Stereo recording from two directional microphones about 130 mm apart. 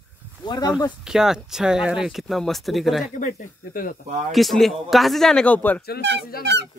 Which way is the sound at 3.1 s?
80° left.